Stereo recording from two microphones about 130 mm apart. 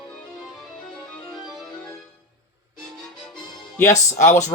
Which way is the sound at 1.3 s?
Centre (ahead or behind).